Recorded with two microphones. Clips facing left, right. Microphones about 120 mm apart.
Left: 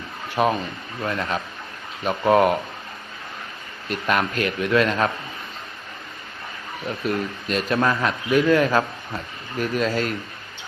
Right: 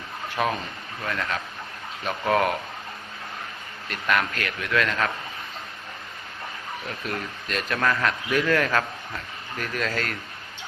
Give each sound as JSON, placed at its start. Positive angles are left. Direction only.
{"t": 0.4, "sound": "speech", "side_deg": 20}
{"t": 3.8, "sound": "speech", "side_deg": 25}
{"t": 6.8, "sound": "speech", "side_deg": 20}